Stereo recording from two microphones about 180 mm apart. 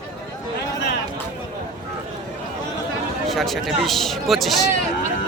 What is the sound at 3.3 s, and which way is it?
Speech, centre (ahead or behind).